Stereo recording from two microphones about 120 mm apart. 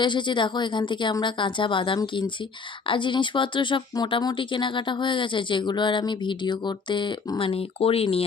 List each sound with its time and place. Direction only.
0.0 s a woman's voice: 40° left (ahead or behind)